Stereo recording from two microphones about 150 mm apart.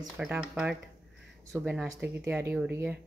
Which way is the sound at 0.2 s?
5° right (ahead or behind).